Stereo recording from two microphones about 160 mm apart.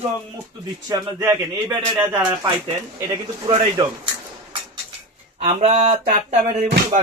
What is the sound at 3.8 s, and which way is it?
Speech, 30° right (ahead or behind).